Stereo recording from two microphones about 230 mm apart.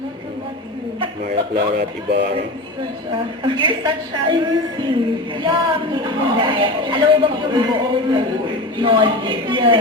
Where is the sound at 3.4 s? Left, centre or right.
Right.